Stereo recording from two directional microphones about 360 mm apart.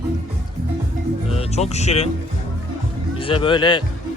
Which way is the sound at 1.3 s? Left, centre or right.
Centre.